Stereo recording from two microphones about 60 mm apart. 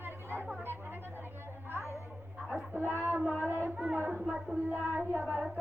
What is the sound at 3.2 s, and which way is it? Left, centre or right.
Child singing, right.